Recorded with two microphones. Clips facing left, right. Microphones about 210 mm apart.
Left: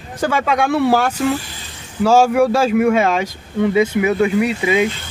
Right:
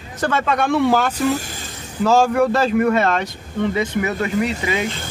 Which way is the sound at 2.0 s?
10° left (ahead or behind).